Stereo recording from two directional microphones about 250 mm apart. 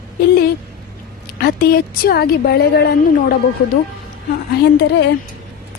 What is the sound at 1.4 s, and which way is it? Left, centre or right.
A woman's voice, left.